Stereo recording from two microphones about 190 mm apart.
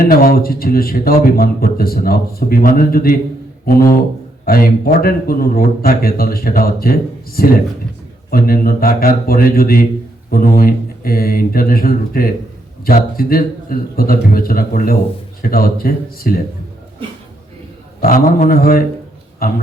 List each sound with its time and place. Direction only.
0.0 s speech: 50° left (ahead or behind)
18.0 s speech: 50° left (ahead or behind)